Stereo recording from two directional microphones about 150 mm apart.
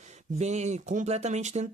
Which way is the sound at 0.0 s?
50° right (ahead or behind).